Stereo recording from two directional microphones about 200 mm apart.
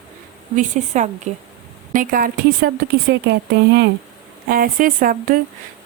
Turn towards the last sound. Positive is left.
turn(degrees=-45)  # may be behind; listen again after turning